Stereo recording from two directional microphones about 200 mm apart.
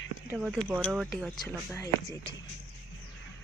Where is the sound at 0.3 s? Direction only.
5° right (ahead or behind).